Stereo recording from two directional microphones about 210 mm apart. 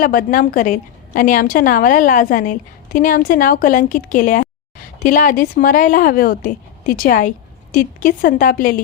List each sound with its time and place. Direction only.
0.0 s a woman's voice: 40° left (ahead or behind)